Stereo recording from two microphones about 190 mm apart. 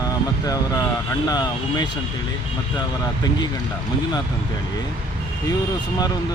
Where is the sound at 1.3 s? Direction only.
20° left (ahead or behind).